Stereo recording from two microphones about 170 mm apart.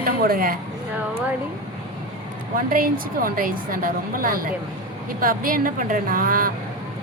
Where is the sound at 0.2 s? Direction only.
60° right (ahead or behind).